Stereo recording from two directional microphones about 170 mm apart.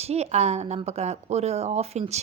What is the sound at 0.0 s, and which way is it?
A woman's voice, 40° right (ahead or behind).